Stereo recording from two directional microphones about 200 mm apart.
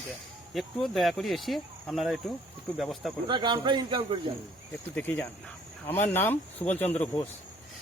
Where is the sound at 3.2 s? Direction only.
25° right (ahead or behind).